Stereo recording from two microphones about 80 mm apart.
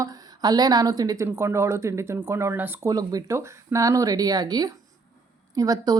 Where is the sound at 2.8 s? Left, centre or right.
Right.